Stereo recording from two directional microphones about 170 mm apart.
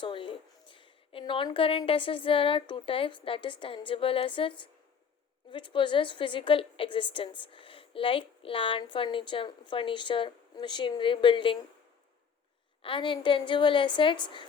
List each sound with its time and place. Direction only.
0.0 s a woman's voice: 30° left (ahead or behind)
12.8 s a woman's voice: 30° left (ahead or behind)